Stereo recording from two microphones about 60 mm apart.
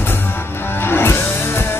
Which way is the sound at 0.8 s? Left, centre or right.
Left.